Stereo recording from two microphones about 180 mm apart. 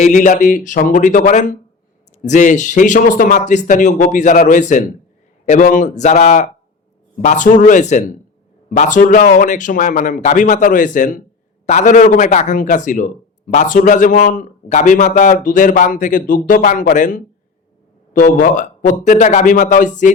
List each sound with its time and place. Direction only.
0.0 s a man's voice: 45° left (ahead or behind)